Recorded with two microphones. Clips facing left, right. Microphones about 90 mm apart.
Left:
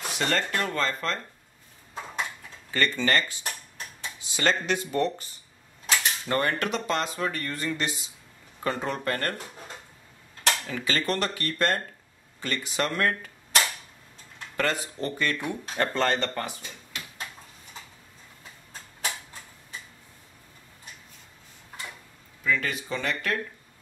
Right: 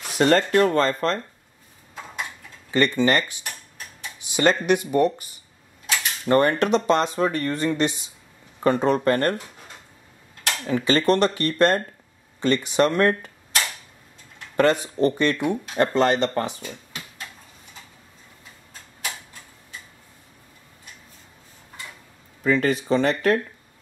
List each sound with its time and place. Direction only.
0.2 s speech: 40° right (ahead or behind)
2.7 s speech: 20° right (ahead or behind)
10.7 s speech: 25° right (ahead or behind)
14.6 s speech: 20° right (ahead or behind)
22.4 s speech: 35° right (ahead or behind)